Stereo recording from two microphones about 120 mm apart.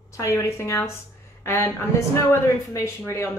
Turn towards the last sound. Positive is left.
turn(degrees=25)  # may be behind; listen again after turning